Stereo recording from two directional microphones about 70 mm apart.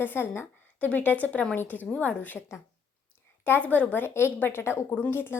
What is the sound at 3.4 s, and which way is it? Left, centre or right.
A woman's voice, left.